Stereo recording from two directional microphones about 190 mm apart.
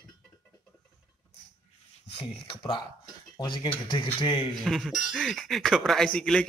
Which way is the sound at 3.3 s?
25° left (ahead or behind).